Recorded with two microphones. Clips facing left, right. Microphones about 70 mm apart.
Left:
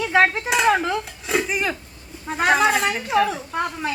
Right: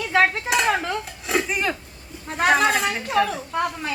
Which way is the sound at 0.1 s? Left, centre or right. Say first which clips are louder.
Even; centre.